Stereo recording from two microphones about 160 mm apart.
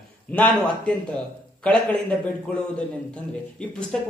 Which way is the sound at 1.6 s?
10° left (ahead or behind).